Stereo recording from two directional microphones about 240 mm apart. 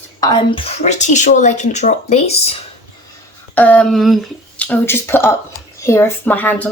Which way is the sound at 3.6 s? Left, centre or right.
Centre.